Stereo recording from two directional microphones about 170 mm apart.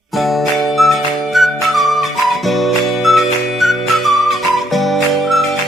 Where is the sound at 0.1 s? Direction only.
Centre (ahead or behind).